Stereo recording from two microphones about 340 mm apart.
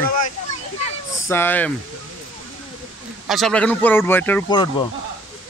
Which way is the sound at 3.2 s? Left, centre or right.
Centre.